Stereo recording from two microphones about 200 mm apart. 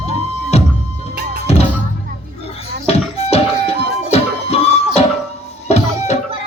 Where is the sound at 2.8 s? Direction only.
30° left (ahead or behind).